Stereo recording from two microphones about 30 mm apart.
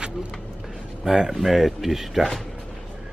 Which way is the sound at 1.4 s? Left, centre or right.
Centre.